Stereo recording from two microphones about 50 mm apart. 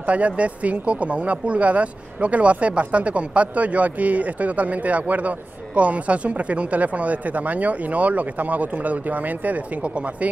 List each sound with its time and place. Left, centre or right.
0.0 s speech: right